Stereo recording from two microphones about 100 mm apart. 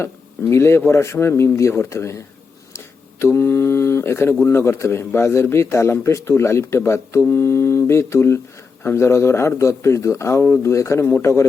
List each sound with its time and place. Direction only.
0.5 s a man's voice: 25° left (ahead or behind)